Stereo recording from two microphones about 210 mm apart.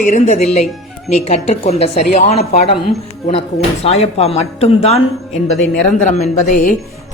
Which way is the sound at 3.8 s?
30° left (ahead or behind).